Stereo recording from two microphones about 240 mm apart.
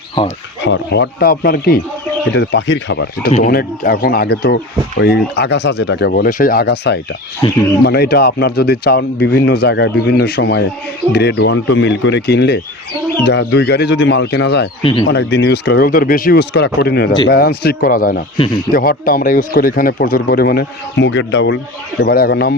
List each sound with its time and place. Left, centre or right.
0.6 s speech: left
7.4 s speech: centre
7.9 s speech: left
18.3 s speech: centre
18.7 s speech: left